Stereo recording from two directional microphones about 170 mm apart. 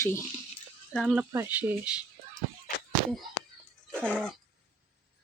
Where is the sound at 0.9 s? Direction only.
5° left (ahead or behind).